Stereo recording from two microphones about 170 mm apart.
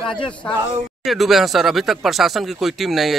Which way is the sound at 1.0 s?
Centre (ahead or behind).